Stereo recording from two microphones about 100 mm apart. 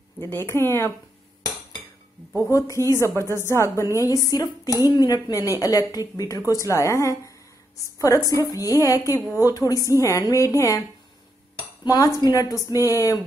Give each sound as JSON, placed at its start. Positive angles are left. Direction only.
{"t": 0.2, "sound": "a woman's voice", "side_deg": 25}
{"t": 2.5, "sound": "a woman's voice", "side_deg": 30}
{"t": 11.8, "sound": "dishes", "side_deg": 40}
{"t": 12.2, "sound": "speech", "side_deg": 40}